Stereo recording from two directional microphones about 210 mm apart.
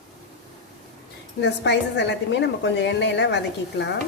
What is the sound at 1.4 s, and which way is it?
Speech, 55° left (ahead or behind).